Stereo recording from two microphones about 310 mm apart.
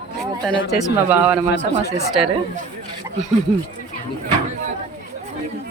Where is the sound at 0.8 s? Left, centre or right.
Centre.